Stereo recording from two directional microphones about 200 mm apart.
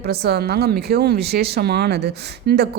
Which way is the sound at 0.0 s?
50° right (ahead or behind).